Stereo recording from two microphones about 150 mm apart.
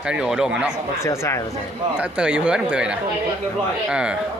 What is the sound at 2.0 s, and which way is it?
Speech, 10° right (ahead or behind).